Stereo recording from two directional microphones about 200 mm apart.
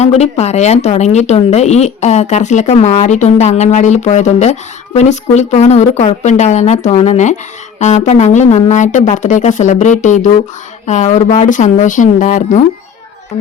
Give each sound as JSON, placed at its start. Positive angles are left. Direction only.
{"t": 0.0, "sound": "speech", "side_deg": 30}